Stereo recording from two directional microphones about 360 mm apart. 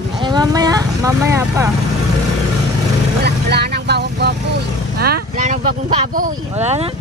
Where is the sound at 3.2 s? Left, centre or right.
Right.